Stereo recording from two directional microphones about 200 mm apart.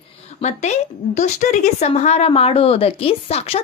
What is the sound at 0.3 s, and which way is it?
Speech, 35° left (ahead or behind).